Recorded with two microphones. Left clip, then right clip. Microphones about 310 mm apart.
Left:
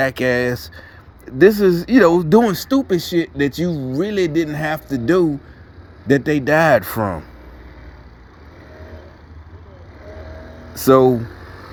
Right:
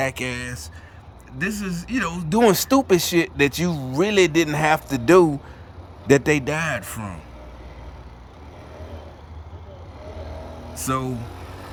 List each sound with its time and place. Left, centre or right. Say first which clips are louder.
0.0 s speech: left 9 dB; centre
2.5 s speech: right 1 dB; centre
6.5 s speech: left 12 dB; centre
10.8 s speech: left 13 dB; centre